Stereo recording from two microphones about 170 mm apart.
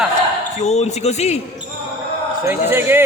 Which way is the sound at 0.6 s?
40° left (ahead or behind).